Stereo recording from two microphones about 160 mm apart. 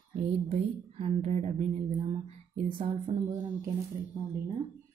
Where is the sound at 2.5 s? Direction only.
30° right (ahead or behind).